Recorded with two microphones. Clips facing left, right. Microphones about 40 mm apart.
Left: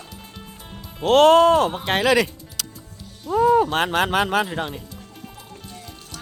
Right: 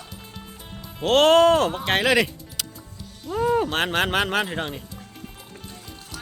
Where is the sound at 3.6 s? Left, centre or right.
Right.